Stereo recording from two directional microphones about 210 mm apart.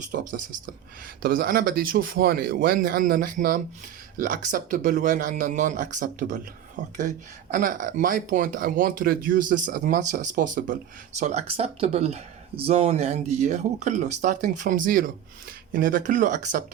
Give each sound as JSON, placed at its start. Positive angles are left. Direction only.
{"t": 0.0, "sound": "speech", "side_deg": -40}